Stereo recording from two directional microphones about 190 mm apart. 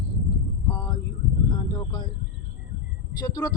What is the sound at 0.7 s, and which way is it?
A woman's voice, 20° left (ahead or behind).